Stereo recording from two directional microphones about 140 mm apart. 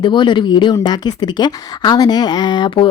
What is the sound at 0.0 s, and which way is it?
Speech, 35° left (ahead or behind).